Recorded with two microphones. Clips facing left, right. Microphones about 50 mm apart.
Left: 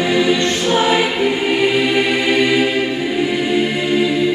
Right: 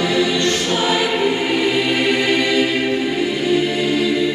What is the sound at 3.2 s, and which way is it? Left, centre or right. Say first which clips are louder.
Music: left 4 dB; centre.